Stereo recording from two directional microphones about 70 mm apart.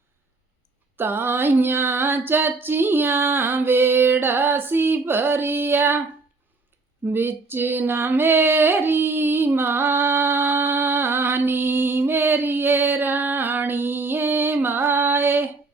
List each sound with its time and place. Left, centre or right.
0.9 s female singing: right
7.0 s female singing: right